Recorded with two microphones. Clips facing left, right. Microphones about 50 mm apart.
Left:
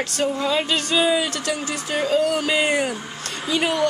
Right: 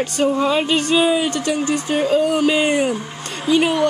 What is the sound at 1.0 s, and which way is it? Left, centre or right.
Speech, centre.